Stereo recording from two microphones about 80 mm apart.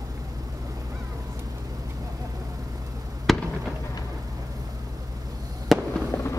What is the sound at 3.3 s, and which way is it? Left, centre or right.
Fireworks, centre.